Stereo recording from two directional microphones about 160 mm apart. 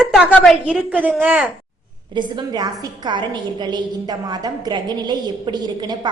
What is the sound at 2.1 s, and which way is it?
A woman's voice, 25° right (ahead or behind).